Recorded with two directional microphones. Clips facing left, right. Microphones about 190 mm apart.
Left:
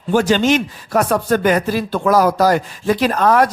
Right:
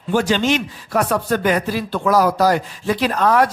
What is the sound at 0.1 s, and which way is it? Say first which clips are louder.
Speech: left 3 dB; 45° left (ahead or behind).